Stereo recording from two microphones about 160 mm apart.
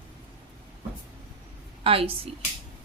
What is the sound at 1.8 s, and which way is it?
Speech, 35° right (ahead or behind).